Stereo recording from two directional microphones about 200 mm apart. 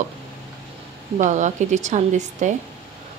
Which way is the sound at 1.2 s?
35° right (ahead or behind).